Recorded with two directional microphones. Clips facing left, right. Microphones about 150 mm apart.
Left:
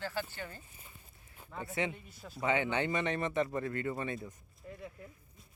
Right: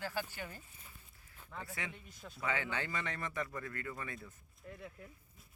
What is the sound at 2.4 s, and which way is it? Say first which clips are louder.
Speech: left 7 dB; 20° left (ahead or behind).